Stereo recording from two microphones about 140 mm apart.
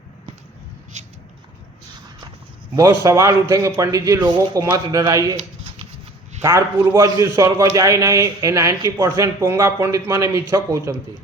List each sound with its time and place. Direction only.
3.0 s a man's voice: 20° right (ahead or behind)
5.4 s a sound: 45° right (ahead or behind)
6.4 s a man's voice: 20° right (ahead or behind)